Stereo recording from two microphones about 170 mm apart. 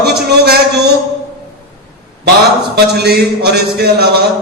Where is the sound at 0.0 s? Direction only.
70° right (ahead or behind).